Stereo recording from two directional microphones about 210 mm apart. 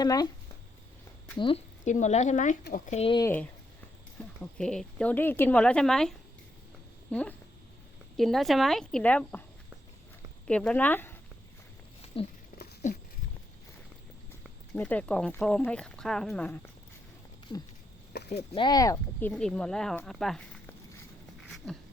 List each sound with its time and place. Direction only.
0.0 s speech: 20° left (ahead or behind)
1.4 s speech: 25° left (ahead or behind)
3.2 s speech: 5° left (ahead or behind)
4.2 s a sound: 5° left (ahead or behind)
4.5 s speech: 5° left (ahead or behind)
10.4 s speech: 5° left (ahead or behind)
12.0 s a sound: 30° left (ahead or behind)
12.8 s speech: 35° left (ahead or behind)
14.7 s speech: 5° left (ahead or behind)
18.1 s a sound: 50° left (ahead or behind)
18.5 s speech: 20° left (ahead or behind)
19.3 s speech: 5° left (ahead or behind)
21.6 s speech: centre (ahead or behind)